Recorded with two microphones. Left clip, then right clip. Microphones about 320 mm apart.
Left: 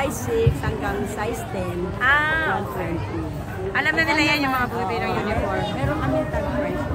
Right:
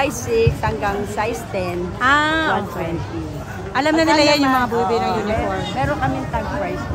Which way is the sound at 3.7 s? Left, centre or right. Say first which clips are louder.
Right 5 dB; centre.